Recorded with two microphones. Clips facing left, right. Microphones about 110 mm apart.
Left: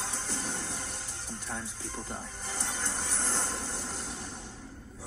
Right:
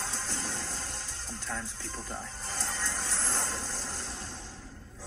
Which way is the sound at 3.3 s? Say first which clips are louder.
Even; 75° right (ahead or behind).